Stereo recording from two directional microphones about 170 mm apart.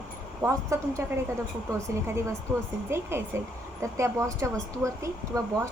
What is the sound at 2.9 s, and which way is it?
A woman's voice, 15° right (ahead or behind).